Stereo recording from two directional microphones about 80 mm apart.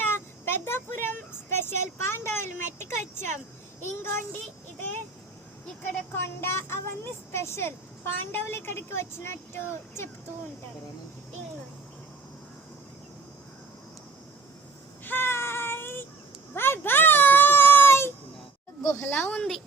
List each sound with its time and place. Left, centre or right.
0.0 s speech: left
3.8 s speech: left
6.1 s a child's voice: left
15.0 s child singing: left
16.6 s a sound: left
18.8 s a sound: left
19.0 s speech: left